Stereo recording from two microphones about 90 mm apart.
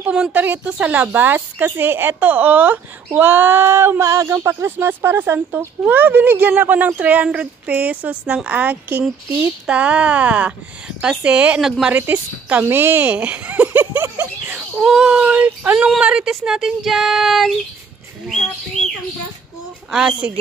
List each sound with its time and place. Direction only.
0.0 s a woman's voice: 15° right (ahead or behind)
4.0 s speech: 40° right (ahead or behind)
4.3 s a woman's voice: 25° right (ahead or behind)
11.6 s speech: 5° right (ahead or behind)
12.6 s a woman's voice: 25° right (ahead or behind)
14.1 s a sound: 20° right (ahead or behind)
14.8 s speech: 5° right (ahead or behind)
15.9 s speech: 10° right (ahead or behind)
19.9 s speech: 5° right (ahead or behind)